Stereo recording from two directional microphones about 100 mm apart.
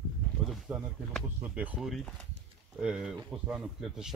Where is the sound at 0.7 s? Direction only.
10° right (ahead or behind).